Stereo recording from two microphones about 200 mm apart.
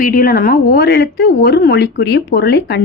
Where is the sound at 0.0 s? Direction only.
45° left (ahead or behind).